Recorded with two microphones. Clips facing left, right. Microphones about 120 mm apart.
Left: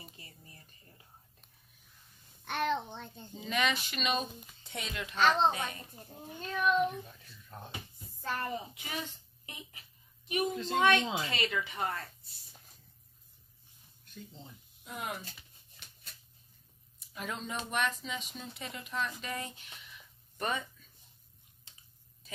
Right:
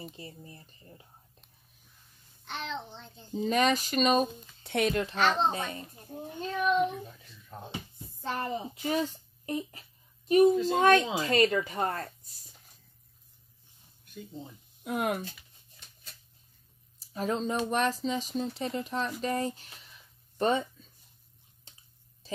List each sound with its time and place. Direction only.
0.0 s speech: 30° right (ahead or behind)
2.4 s a child's voice: 55° left (ahead or behind)
3.3 s speech: 40° right (ahead or behind)
4.6 s a child's voice: 65° right (ahead or behind)
4.9 s speech: 30° right (ahead or behind)
7.5 s speech: 10° right (ahead or behind)
8.2 s speech: 25° right (ahead or behind)
8.8 s a woman's voice: 40° right (ahead or behind)
10.5 s speech: 5° right (ahead or behind)
10.8 s speech: 40° right (ahead or behind)
14.1 s speech: 15° right (ahead or behind)
14.8 s speech: 55° right (ahead or behind)
17.0 s speech: 35° right (ahead or behind)
22.2 s a sound: 30° right (ahead or behind)